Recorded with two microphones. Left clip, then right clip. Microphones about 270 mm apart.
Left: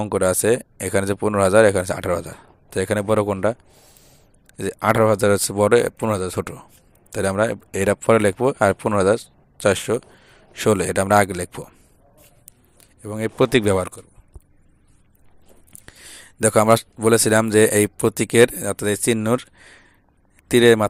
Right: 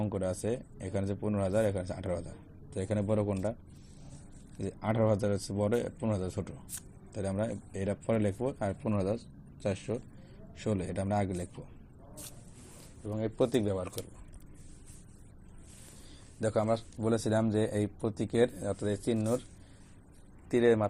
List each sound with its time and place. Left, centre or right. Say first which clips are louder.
0.0 s speech: left 15 dB; left
13.1 s speech: left 11 dB; left
16.4 s speech: left 15 dB; left
20.5 s speech: left 12 dB; left